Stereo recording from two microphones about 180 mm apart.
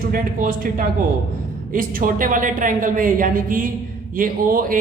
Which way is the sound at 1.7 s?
50° right (ahead or behind).